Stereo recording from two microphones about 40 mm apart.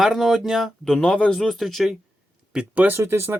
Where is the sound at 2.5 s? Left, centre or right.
Right.